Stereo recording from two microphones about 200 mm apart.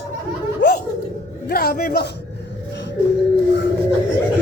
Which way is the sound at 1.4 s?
50° left (ahead or behind).